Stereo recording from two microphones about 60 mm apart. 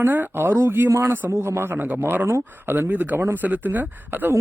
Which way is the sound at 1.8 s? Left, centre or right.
Right.